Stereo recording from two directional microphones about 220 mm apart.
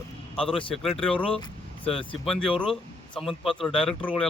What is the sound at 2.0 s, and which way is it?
Speech, centre (ahead or behind).